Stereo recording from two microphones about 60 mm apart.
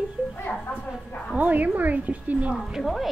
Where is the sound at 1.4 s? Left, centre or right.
Right.